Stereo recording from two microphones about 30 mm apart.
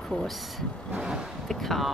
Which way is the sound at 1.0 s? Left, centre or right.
Right.